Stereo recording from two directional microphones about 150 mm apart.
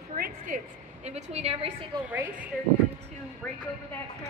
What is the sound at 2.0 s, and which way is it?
Speech, 10° right (ahead or behind).